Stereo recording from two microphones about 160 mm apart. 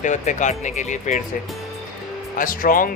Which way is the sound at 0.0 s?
50° left (ahead or behind).